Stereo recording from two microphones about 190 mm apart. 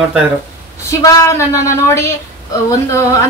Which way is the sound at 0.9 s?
20° left (ahead or behind).